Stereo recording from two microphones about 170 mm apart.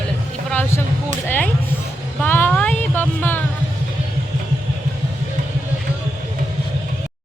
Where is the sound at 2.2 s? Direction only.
10° left (ahead or behind).